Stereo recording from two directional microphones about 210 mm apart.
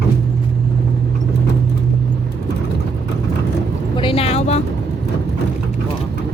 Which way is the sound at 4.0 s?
25° left (ahead or behind).